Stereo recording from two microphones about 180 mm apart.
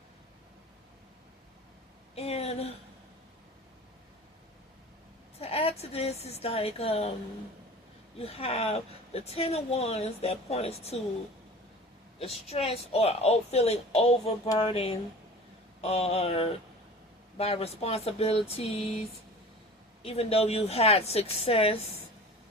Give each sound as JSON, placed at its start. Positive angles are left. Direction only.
{"t": 2.1, "sound": "a sound", "side_deg": 35}
{"t": 5.4, "sound": "a woman's voice", "side_deg": 35}
{"t": 8.2, "sound": "speech", "side_deg": 35}
{"t": 12.5, "sound": "speech", "side_deg": 35}
{"t": 20.1, "sound": "speech", "side_deg": 35}